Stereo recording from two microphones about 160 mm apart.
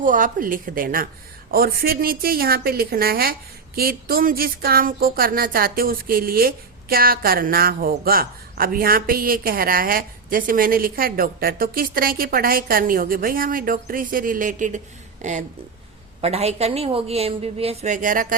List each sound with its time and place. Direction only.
0.0 s a woman's voice: 55° right (ahead or behind)